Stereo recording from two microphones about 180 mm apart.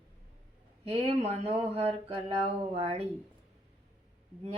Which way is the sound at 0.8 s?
35° right (ahead or behind).